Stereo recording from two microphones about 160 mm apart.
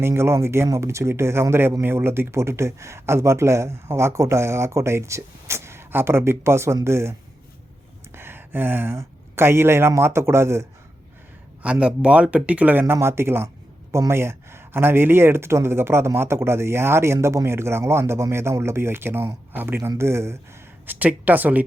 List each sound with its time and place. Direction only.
0.0 s speech: 15° right (ahead or behind)